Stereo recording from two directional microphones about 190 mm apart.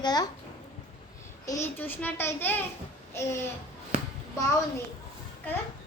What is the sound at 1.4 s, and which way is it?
A child's voice, 15° left (ahead or behind).